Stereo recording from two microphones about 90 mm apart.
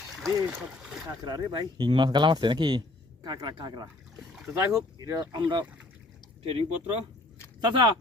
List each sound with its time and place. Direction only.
0.8 s speech: 10° right (ahead or behind)
1.0 s speech: 45° right (ahead or behind)
4.4 s speech: 35° right (ahead or behind)
5.3 s speech: 60° right (ahead or behind)
6.4 s speech: 90° right
7.6 s speech: 60° right (ahead or behind)